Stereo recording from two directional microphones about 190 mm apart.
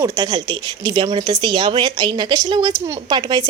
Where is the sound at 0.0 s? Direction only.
20° right (ahead or behind).